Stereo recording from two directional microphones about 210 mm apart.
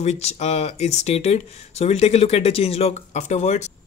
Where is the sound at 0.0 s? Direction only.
30° left (ahead or behind).